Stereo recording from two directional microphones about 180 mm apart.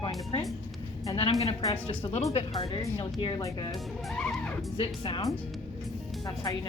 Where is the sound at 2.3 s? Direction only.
30° left (ahead or behind).